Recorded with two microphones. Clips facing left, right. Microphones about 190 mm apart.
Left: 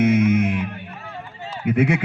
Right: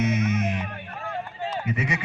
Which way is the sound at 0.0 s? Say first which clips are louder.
Left 8 dB; 55° left (ahead or behind).